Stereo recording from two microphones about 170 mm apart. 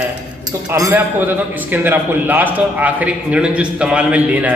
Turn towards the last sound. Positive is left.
turn(degrees=-10)  # may be behind; listen again after turning